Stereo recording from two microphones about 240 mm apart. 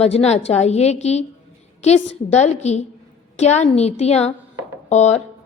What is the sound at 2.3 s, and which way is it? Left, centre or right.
A woman's voice, left.